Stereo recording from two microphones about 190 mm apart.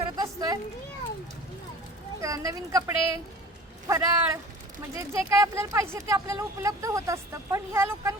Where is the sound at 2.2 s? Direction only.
15° right (ahead or behind).